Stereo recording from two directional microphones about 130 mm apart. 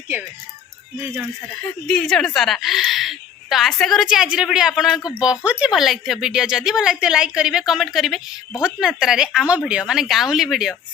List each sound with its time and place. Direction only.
0.9 s speech: 15° right (ahead or behind)
1.9 s a woman's voice: 5° left (ahead or behind)